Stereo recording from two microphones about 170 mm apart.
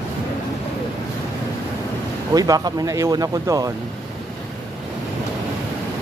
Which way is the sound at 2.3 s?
20° right (ahead or behind).